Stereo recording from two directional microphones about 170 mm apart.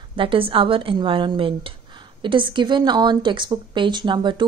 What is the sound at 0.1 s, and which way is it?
A woman's voice, 30° right (ahead or behind).